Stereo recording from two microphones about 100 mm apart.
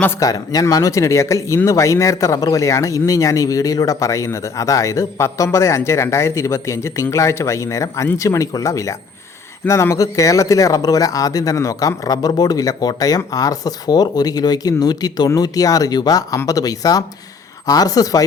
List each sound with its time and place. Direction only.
0.2 s speech: 35° left (ahead or behind)